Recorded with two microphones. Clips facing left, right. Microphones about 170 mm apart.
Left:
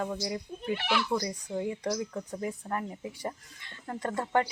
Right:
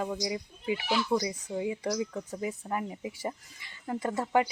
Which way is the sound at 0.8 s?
65° left (ahead or behind).